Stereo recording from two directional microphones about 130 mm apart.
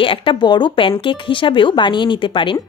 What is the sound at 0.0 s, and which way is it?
A woman's voice, 40° left (ahead or behind).